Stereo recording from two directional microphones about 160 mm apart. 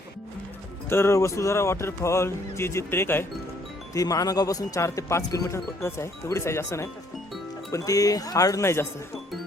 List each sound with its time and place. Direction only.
0.9 s speech: 15° left (ahead or behind)